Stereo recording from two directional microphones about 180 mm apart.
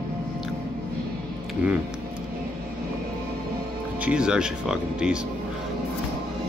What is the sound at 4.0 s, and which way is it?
Speech, 5° right (ahead or behind).